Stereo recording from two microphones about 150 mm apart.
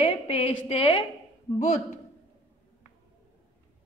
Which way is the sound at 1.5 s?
55° left (ahead or behind).